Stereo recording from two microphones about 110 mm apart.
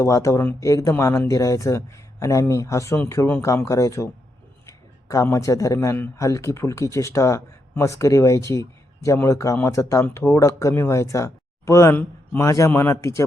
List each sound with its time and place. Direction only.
0.0 s speech: 30° left (ahead or behind)